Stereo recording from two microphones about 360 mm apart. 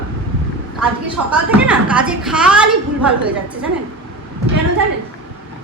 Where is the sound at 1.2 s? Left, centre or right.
Right.